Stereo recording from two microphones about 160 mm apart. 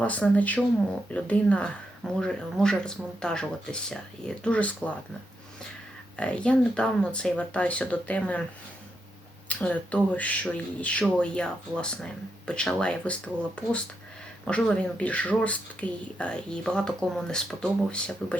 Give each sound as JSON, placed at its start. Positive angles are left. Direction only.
{"t": 0.0, "sound": "speech", "side_deg": 10}
{"t": 6.1, "sound": "speech", "side_deg": 5}
{"t": 9.5, "sound": "speech", "side_deg": 10}